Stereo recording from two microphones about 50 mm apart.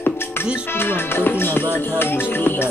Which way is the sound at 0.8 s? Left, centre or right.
Left.